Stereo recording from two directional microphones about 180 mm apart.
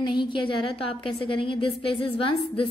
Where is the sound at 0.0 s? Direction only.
25° left (ahead or behind).